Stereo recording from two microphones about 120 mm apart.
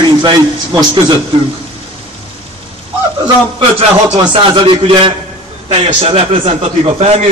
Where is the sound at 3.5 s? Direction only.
40° right (ahead or behind).